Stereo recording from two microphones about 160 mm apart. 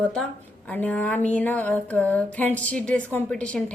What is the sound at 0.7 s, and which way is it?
A woman's voice, 10° left (ahead or behind).